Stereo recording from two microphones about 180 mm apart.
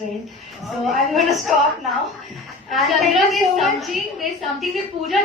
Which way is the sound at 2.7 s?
Centre (ahead or behind).